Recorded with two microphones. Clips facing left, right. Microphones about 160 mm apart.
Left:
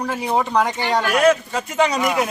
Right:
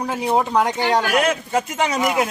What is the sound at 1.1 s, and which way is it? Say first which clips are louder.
Speech: left 2 dB; 20° right (ahead or behind).